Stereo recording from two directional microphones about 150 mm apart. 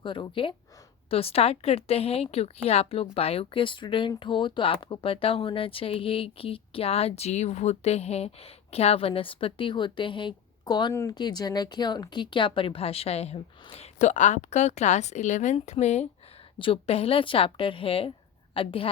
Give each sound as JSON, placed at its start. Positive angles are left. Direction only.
{"t": 0.0, "sound": "speech", "side_deg": 35}
{"t": 16.6, "sound": "speech", "side_deg": 35}